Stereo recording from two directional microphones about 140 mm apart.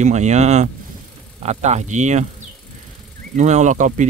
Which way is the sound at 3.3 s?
60° right (ahead or behind).